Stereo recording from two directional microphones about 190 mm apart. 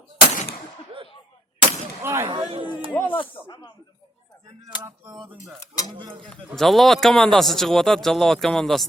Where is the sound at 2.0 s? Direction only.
15° right (ahead or behind).